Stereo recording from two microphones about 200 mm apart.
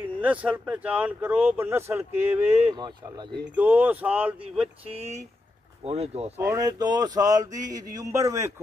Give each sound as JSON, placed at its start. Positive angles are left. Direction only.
{"t": 0.0, "sound": "speech", "side_deg": -10}
{"t": 5.9, "sound": "speech", "side_deg": -30}
{"t": 6.3, "sound": "speech", "side_deg": -15}